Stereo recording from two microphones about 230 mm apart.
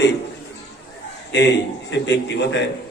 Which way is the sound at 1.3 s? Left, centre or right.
Left.